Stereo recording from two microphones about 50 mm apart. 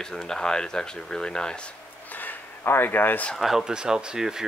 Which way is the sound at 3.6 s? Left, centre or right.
Centre.